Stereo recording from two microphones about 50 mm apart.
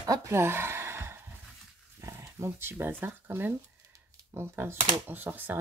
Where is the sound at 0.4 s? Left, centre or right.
Right.